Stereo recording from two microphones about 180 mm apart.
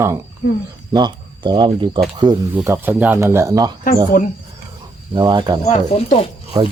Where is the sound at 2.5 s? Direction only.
10° right (ahead or behind).